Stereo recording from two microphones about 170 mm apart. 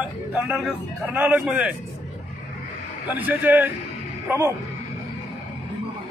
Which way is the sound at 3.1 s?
10° right (ahead or behind).